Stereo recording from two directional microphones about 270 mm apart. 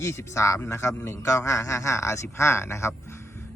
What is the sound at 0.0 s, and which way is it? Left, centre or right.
A man's voice, centre.